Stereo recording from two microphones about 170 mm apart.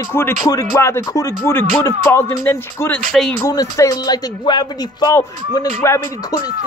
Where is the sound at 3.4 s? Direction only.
20° left (ahead or behind).